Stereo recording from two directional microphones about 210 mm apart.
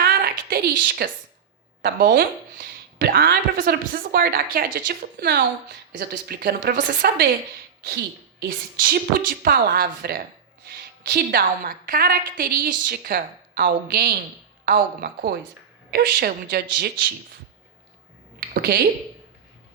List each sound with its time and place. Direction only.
0.0 s a sound: 45° right (ahead or behind)
1.8 s a woman's voice: 45° right (ahead or behind)
18.5 s speech: 45° right (ahead or behind)